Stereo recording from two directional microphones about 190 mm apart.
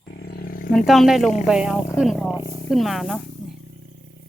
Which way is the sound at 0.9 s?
Centre (ahead or behind).